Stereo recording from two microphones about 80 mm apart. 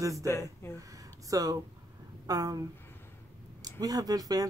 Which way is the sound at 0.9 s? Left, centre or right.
Right.